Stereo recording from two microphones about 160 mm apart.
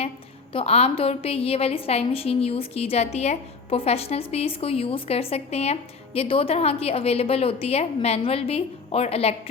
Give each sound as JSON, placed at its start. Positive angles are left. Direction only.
{"t": 0.5, "sound": "a woman's voice", "side_deg": 40}